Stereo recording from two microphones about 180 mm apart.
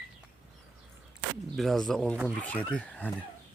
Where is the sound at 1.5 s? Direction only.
Centre (ahead or behind).